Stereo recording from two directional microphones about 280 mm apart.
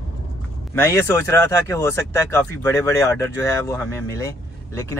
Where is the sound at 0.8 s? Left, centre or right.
Centre.